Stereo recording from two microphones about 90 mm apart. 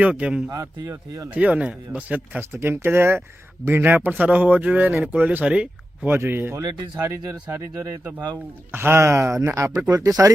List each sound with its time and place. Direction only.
0.0 s a man's voice: 15° right (ahead or behind)
0.5 s speech: 35° right (ahead or behind)
1.3 s a man's voice: 15° right (ahead or behind)
2.5 s a man's voice: 25° right (ahead or behind); by 6.1 s 10° right (ahead or behind)
6.1 s speech: 25° right (ahead or behind)
9.9 s speech: 45° right (ahead or behind)